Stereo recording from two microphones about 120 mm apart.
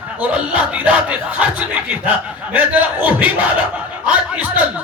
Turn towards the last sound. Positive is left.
turn(degrees=-10)  # may be behind; listen again after turning